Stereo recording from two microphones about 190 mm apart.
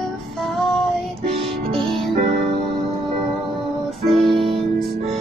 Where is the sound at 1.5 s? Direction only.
Centre (ahead or behind).